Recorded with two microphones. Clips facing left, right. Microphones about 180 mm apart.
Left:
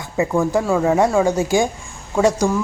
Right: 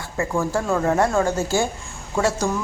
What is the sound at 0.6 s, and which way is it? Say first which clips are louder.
Speech: left 4 dB; 5° left (ahead or behind).